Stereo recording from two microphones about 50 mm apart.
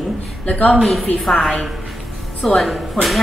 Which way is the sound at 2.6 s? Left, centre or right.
Centre.